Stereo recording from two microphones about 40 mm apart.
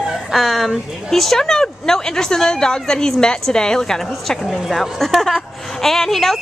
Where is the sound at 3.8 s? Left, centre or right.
Centre.